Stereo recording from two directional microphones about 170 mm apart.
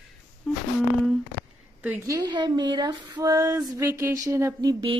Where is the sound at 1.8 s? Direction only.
10° right (ahead or behind).